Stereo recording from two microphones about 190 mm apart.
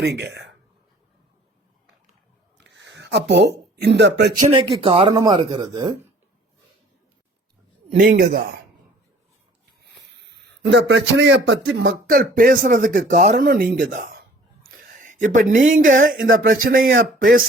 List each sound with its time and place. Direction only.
0.0 s speech: 65° right (ahead or behind)
2.6 s a sound: 65° right (ahead or behind)
4.5 s speech: 30° right (ahead or behind)
7.9 s speech: 50° right (ahead or behind)
10.2 s a man's voice: 65° right (ahead or behind)
12.0 s speech: 50° right (ahead or behind)
14.7 s a sound: 40° right (ahead or behind)
15.4 s speech: 40° right (ahead or behind)